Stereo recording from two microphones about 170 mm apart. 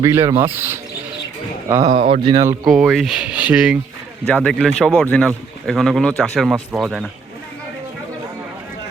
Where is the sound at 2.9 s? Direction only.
Centre (ahead or behind).